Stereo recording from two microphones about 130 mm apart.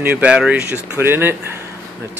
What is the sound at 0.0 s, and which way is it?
Speech, 10° right (ahead or behind).